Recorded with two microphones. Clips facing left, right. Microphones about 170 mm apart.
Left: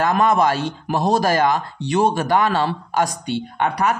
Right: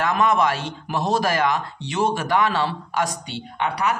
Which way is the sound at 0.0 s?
45° left (ahead or behind).